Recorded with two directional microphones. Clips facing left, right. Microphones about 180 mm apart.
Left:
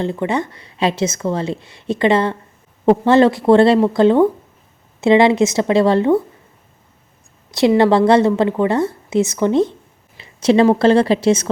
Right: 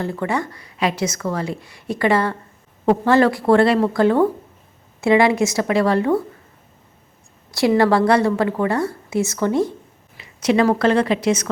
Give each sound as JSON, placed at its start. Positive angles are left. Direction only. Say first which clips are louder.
{"t": 0.0, "sound": "a woman's voice", "louder": "left 3 dB", "side_deg": 20}
{"t": 7.5, "sound": "a woman's voice", "louder": "left 3 dB", "side_deg": 20}